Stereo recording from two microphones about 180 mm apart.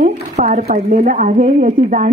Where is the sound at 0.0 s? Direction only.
40° right (ahead or behind).